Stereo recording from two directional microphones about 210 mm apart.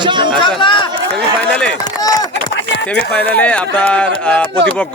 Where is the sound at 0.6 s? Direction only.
20° left (ahead or behind).